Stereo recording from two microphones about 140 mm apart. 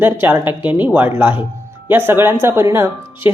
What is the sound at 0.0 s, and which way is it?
Speech, 15° right (ahead or behind).